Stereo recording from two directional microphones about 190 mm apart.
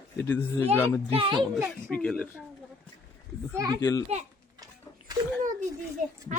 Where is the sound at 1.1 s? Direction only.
25° right (ahead or behind).